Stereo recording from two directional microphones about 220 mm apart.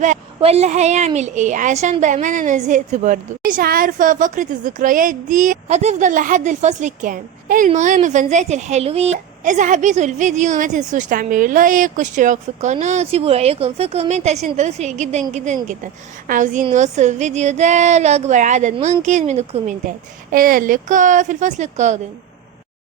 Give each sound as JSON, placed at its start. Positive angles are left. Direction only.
{"t": 0.3, "sound": "a woman's voice", "side_deg": -30}